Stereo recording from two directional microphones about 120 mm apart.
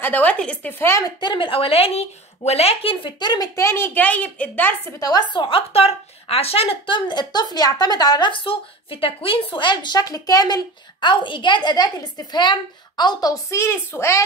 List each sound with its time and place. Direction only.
0.0 s speech: 15° left (ahead or behind)
1.0 s a woman's voice: 40° left (ahead or behind); by 4.7 s 15° left (ahead or behind)
4.9 s a woman's voice: 30° left (ahead or behind); by 7.0 s 50° left (ahead or behind)
7.1 s a woman's voice: 35° left (ahead or behind)